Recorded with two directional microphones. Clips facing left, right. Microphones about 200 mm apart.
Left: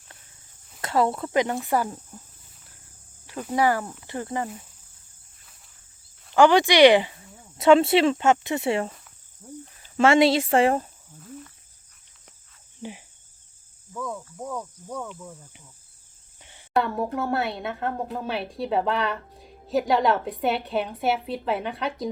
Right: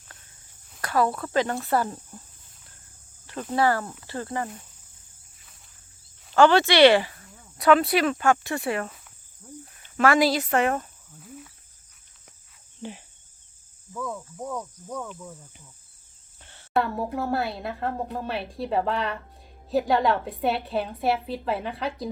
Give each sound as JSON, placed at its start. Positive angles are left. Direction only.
{"t": 0.8, "sound": "speech", "side_deg": 25}
{"t": 3.2, "sound": "speech", "side_deg": 10}
{"t": 6.3, "sound": "speech", "side_deg": 15}
{"t": 9.4, "sound": "cricket", "side_deg": 25}
{"t": 10.0, "sound": "speech", "side_deg": 25}
{"t": 11.2, "sound": "cricket", "side_deg": -5}
{"t": 13.9, "sound": "speech", "side_deg": 0}
{"t": 16.4, "sound": "a sound", "side_deg": 15}
{"t": 16.7, "sound": "speech", "side_deg": 0}